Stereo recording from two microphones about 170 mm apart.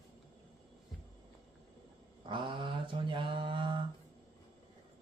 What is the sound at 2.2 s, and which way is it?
Mantra, 30° right (ahead or behind).